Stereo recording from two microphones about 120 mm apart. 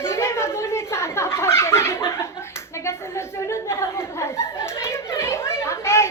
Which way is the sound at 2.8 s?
25° left (ahead or behind).